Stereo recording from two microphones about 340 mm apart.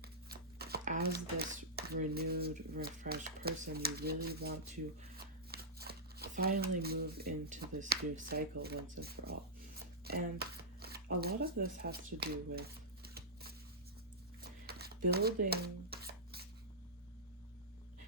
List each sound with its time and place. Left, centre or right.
0.0 s speech: right
14.7 s rub: right